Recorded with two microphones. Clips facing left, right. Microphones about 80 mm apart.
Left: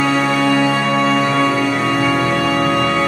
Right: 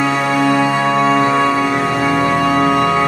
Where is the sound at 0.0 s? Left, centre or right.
Centre.